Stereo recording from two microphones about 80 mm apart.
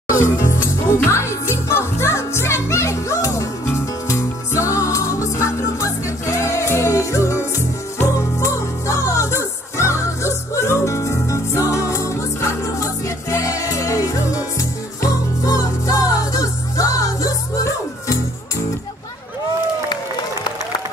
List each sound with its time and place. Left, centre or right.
0.2 s music: left
8.4 s music: left
19.9 s applause: left